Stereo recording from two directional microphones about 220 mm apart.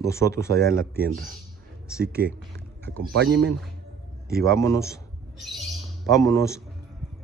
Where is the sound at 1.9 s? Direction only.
5° right (ahead or behind).